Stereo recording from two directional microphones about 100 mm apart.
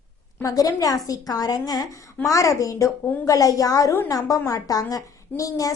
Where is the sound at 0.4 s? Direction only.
35° left (ahead or behind).